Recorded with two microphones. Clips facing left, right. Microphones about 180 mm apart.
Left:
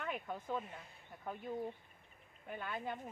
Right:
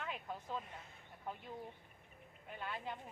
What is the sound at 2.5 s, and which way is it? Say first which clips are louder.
Speech: left 3 dB; 50° left (ahead or behind).